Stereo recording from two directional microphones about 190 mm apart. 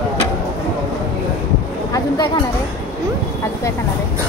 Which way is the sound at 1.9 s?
25° left (ahead or behind).